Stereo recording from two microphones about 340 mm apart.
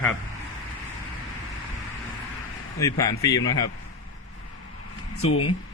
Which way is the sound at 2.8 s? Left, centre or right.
Centre.